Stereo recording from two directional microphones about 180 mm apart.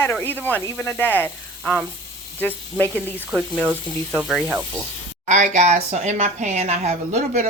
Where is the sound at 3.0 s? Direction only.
5° right (ahead or behind).